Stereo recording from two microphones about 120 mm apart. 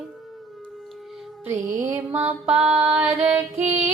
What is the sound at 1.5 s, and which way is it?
Music, 90° right.